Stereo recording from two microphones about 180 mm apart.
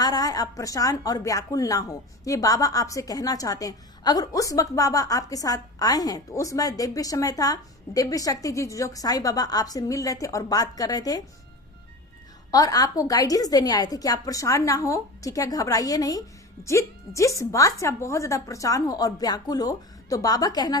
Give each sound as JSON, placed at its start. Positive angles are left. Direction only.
{"t": 0.0, "sound": "a woman's voice", "side_deg": 20}
{"t": 12.5, "sound": "a woman's voice", "side_deg": 20}